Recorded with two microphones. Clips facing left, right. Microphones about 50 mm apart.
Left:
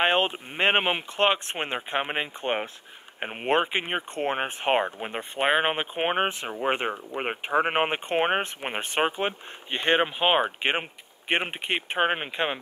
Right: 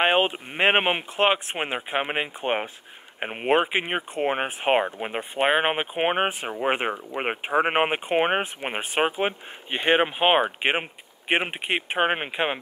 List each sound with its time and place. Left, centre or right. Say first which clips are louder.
0.0 s speech: right 2 dB; centre